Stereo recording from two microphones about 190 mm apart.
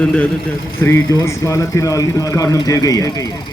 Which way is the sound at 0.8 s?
15° left (ahead or behind).